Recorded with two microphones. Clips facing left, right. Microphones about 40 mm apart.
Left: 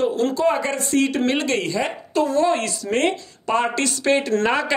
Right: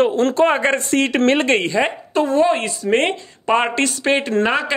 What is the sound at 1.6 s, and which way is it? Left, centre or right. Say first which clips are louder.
Speech: right 5 dB; right.